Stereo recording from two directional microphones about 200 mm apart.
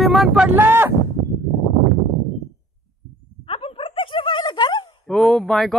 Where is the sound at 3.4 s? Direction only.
30° left (ahead or behind).